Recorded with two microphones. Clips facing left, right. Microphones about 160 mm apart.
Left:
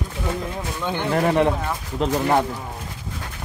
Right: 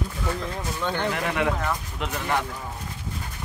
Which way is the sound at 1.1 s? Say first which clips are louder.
Left 10 dB; 35° left (ahead or behind).